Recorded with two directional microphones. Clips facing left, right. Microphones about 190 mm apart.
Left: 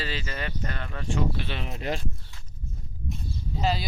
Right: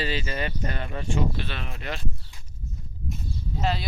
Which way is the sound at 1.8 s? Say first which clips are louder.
Left 6 dB; 35° left (ahead or behind).